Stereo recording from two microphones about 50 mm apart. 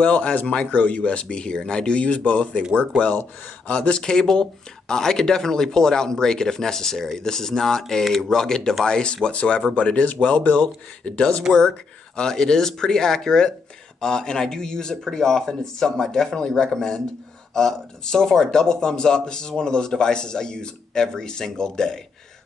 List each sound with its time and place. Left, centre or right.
0.0 s speech: left